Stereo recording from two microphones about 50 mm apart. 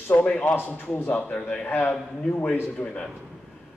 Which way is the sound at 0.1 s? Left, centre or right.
Left.